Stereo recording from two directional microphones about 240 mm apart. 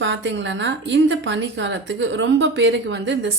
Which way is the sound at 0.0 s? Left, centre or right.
Right.